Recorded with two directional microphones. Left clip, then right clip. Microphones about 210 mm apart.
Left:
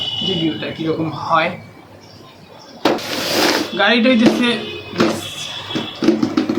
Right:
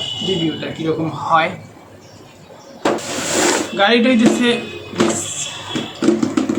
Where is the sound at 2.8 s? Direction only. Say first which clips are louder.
Left 1 dB; 30° left (ahead or behind).